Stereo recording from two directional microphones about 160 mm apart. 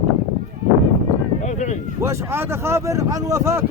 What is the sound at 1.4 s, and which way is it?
Speech, 50° left (ahead or behind).